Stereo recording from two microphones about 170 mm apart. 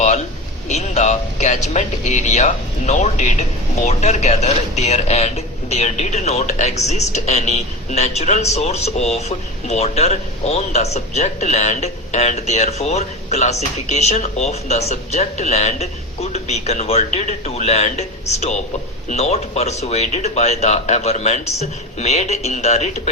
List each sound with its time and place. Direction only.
0.7 s a man's voice: 40° left (ahead or behind)